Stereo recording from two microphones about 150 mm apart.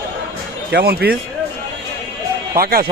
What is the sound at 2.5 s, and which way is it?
Speech, 80° right.